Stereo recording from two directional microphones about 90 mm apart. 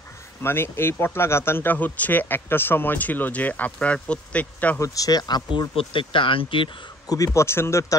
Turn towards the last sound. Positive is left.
turn(degrees=35)  # may be behind; listen again after turning